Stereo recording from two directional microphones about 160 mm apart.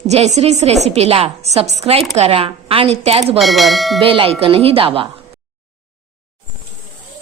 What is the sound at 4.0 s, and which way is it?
A woman's voice, 35° right (ahead or behind).